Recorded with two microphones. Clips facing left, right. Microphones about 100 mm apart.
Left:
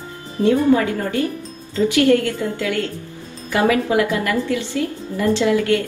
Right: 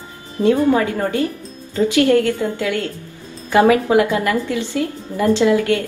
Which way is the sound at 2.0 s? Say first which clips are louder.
Right 1 dB; 20° right (ahead or behind).